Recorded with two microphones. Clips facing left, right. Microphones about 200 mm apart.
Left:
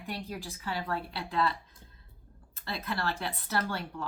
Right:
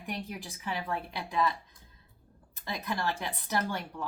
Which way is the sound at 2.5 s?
15° right (ahead or behind).